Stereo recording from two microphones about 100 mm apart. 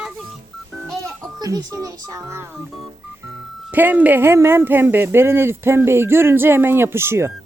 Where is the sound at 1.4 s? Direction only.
35° right (ahead or behind).